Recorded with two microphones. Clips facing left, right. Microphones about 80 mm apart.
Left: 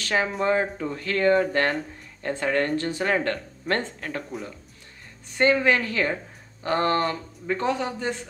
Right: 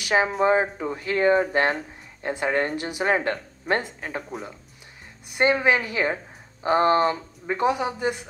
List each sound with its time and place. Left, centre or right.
0.0 s speech: centre
5.3 s speech: centre